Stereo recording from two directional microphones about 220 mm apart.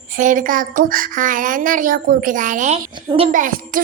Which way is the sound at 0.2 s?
35° right (ahead or behind).